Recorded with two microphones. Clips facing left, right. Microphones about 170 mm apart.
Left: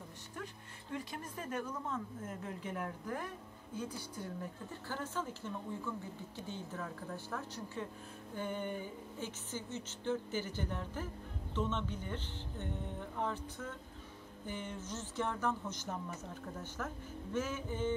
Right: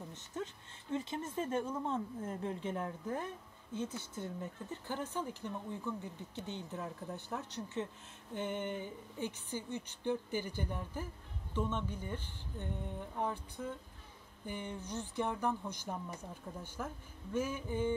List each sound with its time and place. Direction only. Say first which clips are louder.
0.3 s music: right 5 dB; 25° right (ahead or behind)
0.9 s speech: right 6 dB; 25° right (ahead or behind)